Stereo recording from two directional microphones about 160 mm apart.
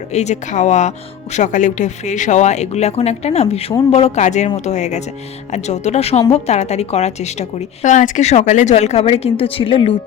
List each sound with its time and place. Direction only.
0.1 s a woman's voice: 45° left (ahead or behind)